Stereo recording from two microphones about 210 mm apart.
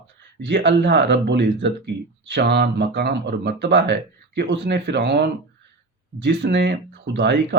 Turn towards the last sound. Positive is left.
turn(degrees=-55)  # may be behind; listen again after turning